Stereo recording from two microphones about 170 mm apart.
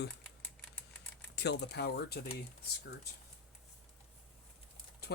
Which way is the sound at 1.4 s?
75° left (ahead or behind).